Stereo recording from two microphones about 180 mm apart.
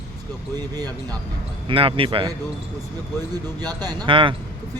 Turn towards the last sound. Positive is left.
turn(degrees=-30)  # may be behind; listen again after turning